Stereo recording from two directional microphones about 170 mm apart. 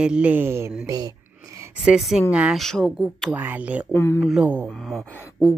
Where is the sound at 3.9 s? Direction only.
15° left (ahead or behind).